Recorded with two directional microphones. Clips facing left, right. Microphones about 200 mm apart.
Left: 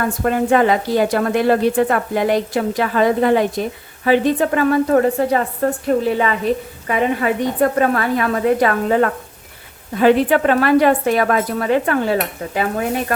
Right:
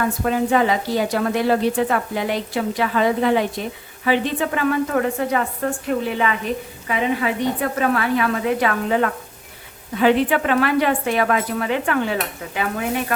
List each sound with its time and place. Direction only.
0.3 s a woman's voice: 55° left (ahead or behind)